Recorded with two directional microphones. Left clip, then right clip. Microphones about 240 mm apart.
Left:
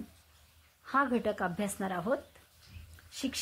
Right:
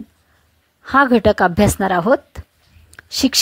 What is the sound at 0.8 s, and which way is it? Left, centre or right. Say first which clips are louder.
Speech: right 17 dB; right.